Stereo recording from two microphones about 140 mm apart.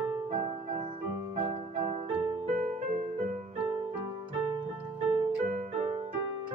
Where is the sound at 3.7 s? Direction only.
35° right (ahead or behind).